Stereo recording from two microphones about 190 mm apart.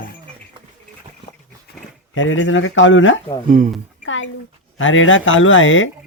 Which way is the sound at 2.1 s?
90° left.